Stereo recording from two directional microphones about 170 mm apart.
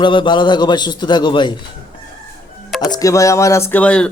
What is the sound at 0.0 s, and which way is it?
A man's voice, 30° left (ahead or behind).